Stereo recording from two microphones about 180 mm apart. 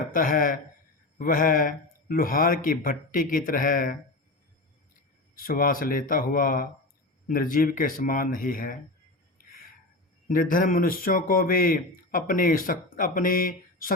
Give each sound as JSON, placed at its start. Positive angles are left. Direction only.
{"t": 0.1, "sound": "speech", "side_deg": 50}
{"t": 5.3, "sound": "speech", "side_deg": 50}
{"t": 10.2, "sound": "speech", "side_deg": 50}